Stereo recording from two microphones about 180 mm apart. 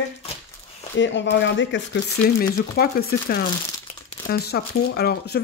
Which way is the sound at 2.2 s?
60° left (ahead or behind).